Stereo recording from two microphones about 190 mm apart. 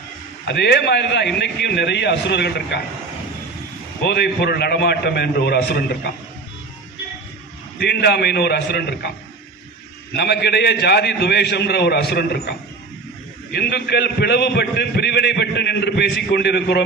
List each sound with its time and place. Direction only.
0.4 s a man's voice: 65° left (ahead or behind)
4.0 s a man's voice: 60° left (ahead or behind)
7.8 s a man's voice: 60° left (ahead or behind)
10.2 s a man's voice: 60° left (ahead or behind)